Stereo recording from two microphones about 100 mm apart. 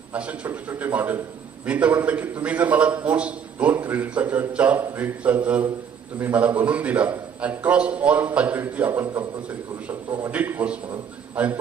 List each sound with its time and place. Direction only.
0.1 s a man's voice: 15° right (ahead or behind)
10.3 s a man's voice: 20° right (ahead or behind)